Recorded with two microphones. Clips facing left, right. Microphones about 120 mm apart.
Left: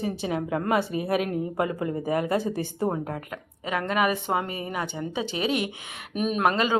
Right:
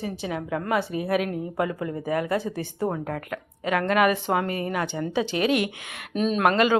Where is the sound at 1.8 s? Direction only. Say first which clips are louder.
Left 1 dB; 25° left (ahead or behind).